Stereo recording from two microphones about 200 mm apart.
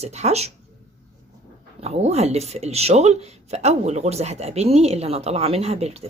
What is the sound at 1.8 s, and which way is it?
Speech, 30° right (ahead or behind).